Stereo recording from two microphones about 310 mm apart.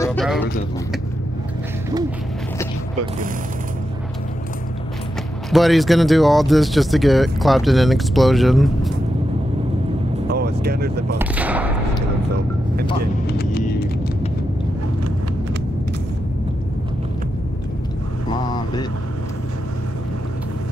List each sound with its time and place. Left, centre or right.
0.0 s a sound: centre
5.5 s speech: centre
10.3 s vehicle: right
11.1 s speech: centre
13.3 s vehicle: left
18.3 s vehicle: centre